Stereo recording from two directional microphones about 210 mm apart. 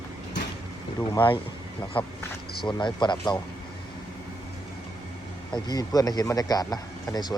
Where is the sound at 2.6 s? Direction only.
20° left (ahead or behind).